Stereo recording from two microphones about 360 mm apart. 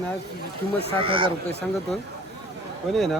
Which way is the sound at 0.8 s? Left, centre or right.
Centre.